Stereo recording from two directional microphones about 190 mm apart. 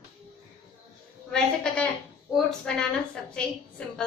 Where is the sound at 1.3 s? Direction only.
5° left (ahead or behind).